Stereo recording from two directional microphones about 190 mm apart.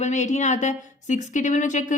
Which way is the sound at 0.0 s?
40° left (ahead or behind).